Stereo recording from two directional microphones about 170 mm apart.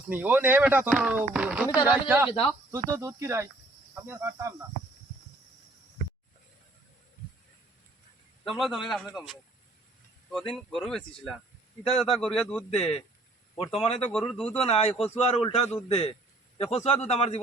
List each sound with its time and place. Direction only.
0.1 s speech: 10° right (ahead or behind)
8.4 s a man's voice: centre (ahead or behind)
10.7 s a man's voice: centre (ahead or behind)
11.8 s a man's voice: 35° left (ahead or behind)
12.1 s a man's voice: centre (ahead or behind)
12.7 s a man's voice: 35° left (ahead or behind)
14.1 s a man's voice: 5° left (ahead or behind)
14.6 s a man's voice: 35° left (ahead or behind)